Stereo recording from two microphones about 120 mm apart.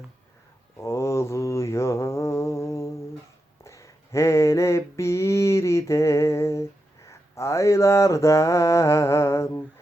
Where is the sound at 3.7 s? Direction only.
25° left (ahead or behind).